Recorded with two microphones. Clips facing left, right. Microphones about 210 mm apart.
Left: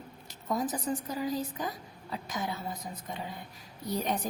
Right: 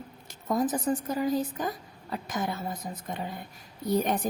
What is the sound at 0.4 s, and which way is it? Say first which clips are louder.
A woman's voice: right 5 dB; 50° right (ahead or behind).